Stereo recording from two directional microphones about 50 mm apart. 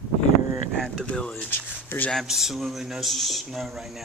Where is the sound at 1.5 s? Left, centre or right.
Left.